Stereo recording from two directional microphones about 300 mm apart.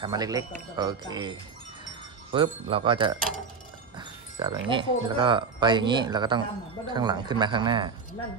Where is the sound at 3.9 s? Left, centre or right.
Centre.